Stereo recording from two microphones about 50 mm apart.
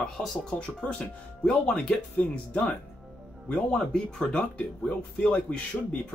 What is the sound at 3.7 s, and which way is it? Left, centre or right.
Speech, centre.